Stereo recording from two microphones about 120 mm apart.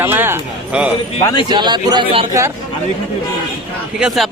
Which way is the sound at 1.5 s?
35° right (ahead or behind).